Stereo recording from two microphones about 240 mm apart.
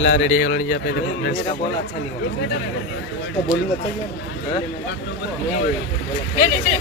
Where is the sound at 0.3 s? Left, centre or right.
Left.